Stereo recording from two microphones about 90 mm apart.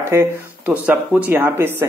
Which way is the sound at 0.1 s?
25° right (ahead or behind).